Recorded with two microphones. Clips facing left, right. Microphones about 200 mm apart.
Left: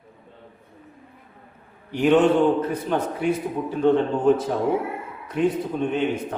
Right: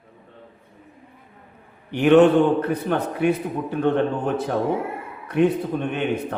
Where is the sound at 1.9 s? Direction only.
65° right (ahead or behind).